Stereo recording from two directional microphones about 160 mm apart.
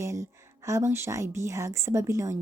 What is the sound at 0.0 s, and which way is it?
Speech, 20° right (ahead or behind).